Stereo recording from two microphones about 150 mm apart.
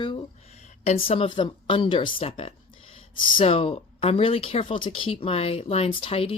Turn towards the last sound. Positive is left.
turn(degrees=40)  # may be behind; listen again after turning